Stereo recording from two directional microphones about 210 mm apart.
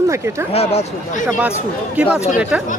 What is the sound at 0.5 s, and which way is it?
Speech, 30° left (ahead or behind).